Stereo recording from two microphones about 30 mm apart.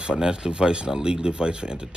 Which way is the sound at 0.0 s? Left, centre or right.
Right.